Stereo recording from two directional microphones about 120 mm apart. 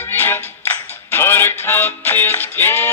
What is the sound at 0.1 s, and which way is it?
Music, 20° left (ahead or behind).